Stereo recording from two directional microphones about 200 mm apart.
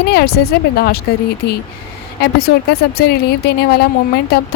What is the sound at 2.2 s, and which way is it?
Speech, 50° left (ahead or behind).